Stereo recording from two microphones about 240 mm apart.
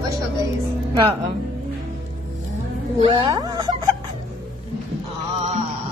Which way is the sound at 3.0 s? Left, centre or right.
Centre.